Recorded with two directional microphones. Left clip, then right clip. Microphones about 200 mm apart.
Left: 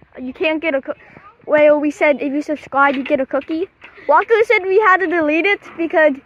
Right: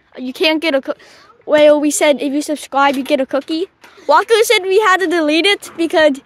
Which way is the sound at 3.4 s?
15° right (ahead or behind).